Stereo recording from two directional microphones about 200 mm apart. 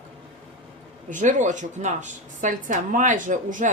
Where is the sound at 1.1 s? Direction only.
40° right (ahead or behind).